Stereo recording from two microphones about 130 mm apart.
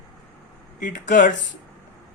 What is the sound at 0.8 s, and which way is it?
Speech, 80° left.